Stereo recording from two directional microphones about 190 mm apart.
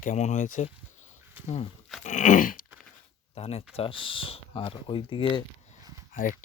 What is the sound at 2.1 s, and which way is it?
Speech, 40° left (ahead or behind).